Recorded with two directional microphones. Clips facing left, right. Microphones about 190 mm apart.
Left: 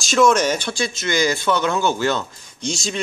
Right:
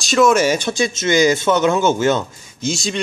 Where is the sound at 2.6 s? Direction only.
Centre (ahead or behind).